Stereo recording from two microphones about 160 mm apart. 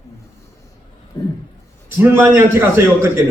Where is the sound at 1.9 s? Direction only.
15° right (ahead or behind).